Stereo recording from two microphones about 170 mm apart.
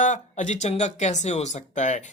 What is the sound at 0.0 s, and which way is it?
Speech, 45° left (ahead or behind).